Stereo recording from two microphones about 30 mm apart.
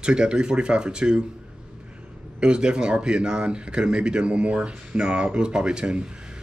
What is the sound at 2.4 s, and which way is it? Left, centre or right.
Speech, right.